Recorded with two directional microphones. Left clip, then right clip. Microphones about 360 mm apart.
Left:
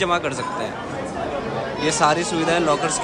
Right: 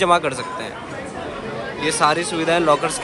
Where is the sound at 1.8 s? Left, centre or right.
Centre.